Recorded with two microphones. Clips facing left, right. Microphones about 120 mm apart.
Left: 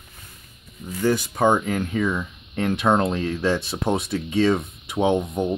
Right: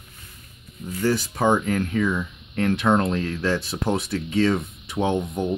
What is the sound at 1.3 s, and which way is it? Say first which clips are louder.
Speech: left 1 dB; 15° left (ahead or behind).